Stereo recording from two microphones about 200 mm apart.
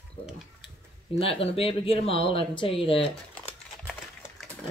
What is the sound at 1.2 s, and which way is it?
Speech, 30° left (ahead or behind).